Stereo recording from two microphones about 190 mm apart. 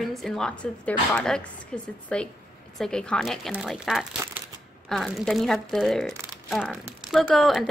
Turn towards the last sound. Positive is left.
turn(degrees=0)  # may be behind; listen again after turning